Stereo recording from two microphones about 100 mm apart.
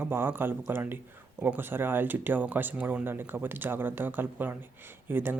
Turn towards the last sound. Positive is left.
turn(degrees=-20)  # may be behind; listen again after turning